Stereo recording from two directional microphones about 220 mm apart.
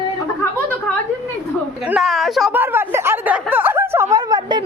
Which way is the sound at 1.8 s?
5° right (ahead or behind).